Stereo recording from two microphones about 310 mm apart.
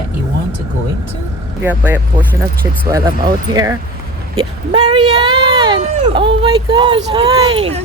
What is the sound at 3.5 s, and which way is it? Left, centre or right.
Speech, centre.